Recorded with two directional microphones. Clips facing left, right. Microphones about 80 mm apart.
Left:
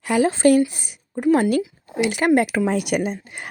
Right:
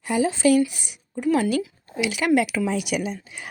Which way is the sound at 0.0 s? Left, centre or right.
Left.